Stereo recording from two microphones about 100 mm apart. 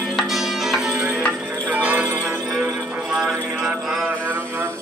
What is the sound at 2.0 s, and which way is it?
Music, 25° right (ahead or behind).